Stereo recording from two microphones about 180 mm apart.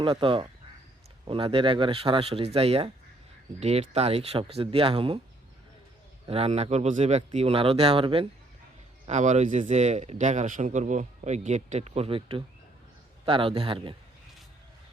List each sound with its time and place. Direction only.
0.0 s speech: 30° right (ahead or behind)
6.2 s speech: 35° right (ahead or behind)
9.0 s speech: 40° right (ahead or behind)